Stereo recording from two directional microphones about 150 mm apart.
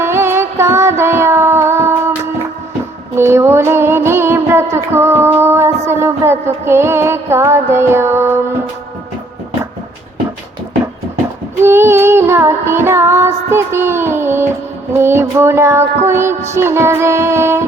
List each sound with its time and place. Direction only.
0.0 s music: 15° right (ahead or behind)
3.2 s music: 15° right (ahead or behind)
11.6 s child singing: 15° right (ahead or behind)
14.9 s music: 15° right (ahead or behind)